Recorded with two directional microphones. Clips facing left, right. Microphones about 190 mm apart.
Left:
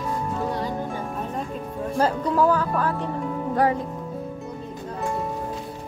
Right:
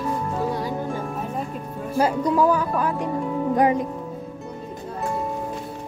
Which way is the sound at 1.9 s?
10° right (ahead or behind).